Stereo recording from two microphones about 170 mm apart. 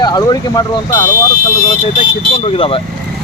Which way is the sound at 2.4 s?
35° left (ahead or behind).